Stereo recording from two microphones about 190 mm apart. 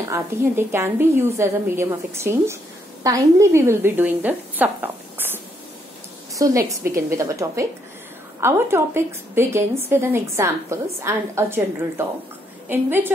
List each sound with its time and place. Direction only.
0.0 s a woman's voice: 15° right (ahead or behind)